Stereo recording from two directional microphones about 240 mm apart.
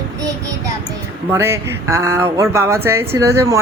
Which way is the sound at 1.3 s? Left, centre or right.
Centre.